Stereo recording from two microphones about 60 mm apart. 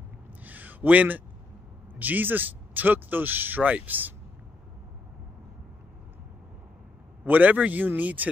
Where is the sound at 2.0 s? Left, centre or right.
Right.